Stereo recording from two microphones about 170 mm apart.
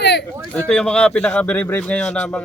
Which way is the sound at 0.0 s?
80° left.